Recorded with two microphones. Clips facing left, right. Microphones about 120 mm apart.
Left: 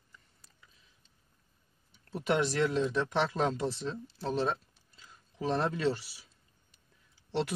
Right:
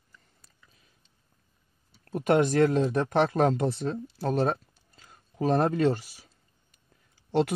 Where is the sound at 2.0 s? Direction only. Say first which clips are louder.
Right 7 dB; 50° right (ahead or behind).